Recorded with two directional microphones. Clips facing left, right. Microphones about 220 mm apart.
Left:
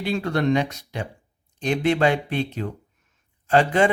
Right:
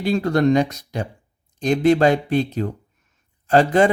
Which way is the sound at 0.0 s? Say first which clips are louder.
Right 5 dB; 40° right (ahead or behind).